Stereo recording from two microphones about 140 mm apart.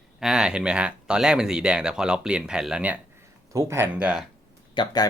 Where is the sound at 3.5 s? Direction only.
20° right (ahead or behind).